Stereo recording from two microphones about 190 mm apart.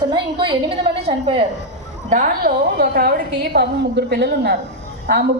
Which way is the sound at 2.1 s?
45° right (ahead or behind).